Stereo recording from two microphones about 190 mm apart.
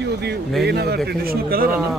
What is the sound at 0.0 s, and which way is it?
Speech, 60° right (ahead or behind).